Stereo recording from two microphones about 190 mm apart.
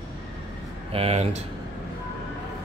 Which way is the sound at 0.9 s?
35° right (ahead or behind).